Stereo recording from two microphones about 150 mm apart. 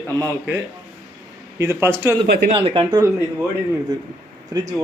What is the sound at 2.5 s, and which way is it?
Speech, 35° right (ahead or behind).